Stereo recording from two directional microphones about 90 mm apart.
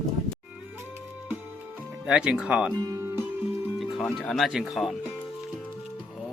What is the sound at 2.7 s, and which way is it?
Music, 35° right (ahead or behind).